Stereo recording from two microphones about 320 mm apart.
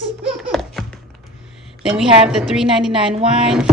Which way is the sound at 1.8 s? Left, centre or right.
Centre.